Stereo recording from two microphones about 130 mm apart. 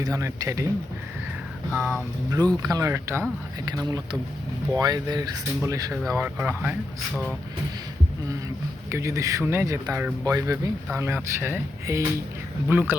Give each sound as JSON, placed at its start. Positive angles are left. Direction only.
{"t": 0.0, "sound": "speech", "side_deg": -25}
{"t": 1.7, "sound": "a sound", "side_deg": -5}
{"t": 2.6, "sound": "speech", "side_deg": -25}
{"t": 8.9, "sound": "speech", "side_deg": -25}